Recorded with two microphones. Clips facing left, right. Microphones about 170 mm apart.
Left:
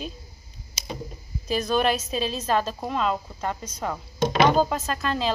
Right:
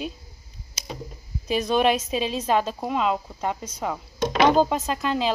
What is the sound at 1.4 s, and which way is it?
A woman's voice, 15° right (ahead or behind).